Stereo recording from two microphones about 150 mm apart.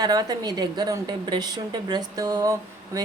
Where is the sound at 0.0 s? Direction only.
25° right (ahead or behind).